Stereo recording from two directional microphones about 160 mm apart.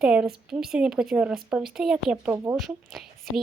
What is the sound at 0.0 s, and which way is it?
Speech, 5° right (ahead or behind).